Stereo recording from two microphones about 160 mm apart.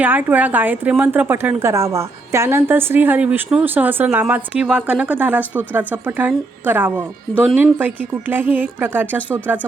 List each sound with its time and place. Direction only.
0.0 s a woman's voice: 10° right (ahead or behind)